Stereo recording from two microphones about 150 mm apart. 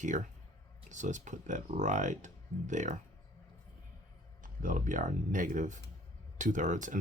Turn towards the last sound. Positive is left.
turn(degrees=-55)  # may be behind; listen again after turning